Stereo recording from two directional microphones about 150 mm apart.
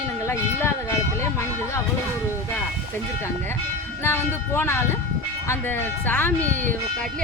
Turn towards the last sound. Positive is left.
turn(degrees=15)  # may be behind; listen again after turning